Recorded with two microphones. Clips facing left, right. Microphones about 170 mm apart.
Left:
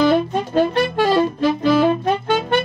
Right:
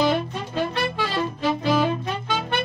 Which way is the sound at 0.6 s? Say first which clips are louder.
Left 8 dB; 50° left (ahead or behind).